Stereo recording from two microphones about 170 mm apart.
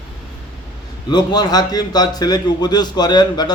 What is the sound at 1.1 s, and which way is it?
A man's voice, 25° left (ahead or behind).